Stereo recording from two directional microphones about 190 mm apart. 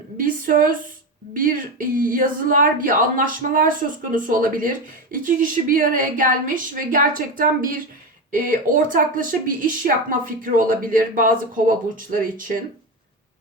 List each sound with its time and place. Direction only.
0.2 s speech: 45° right (ahead or behind)